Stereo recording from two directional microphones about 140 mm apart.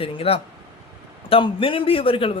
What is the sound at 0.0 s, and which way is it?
A man's voice, 45° left (ahead or behind).